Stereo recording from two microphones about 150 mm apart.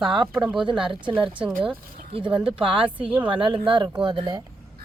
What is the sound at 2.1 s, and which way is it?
A woman's voice, 35° right (ahead or behind).